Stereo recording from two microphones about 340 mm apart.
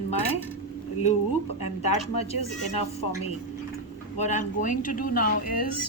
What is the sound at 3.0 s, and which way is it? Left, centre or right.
Speech, left.